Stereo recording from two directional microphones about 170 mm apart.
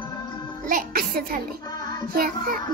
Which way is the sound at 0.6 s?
55° right (ahead or behind).